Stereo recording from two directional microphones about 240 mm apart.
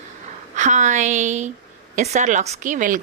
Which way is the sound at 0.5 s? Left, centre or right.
Right.